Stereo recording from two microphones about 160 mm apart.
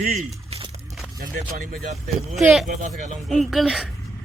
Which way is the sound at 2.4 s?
Centre (ahead or behind).